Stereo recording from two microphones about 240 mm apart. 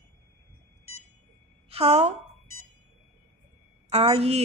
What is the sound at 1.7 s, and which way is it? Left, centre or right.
Speech, right.